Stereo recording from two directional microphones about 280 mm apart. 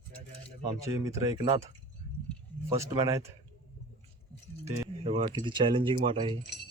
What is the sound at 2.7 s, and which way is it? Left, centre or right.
Speech, centre.